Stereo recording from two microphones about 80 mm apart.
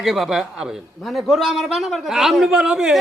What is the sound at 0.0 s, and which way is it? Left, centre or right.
A man's voice, centre.